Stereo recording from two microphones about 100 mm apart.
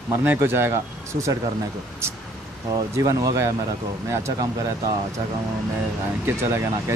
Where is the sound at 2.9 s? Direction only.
35° right (ahead or behind).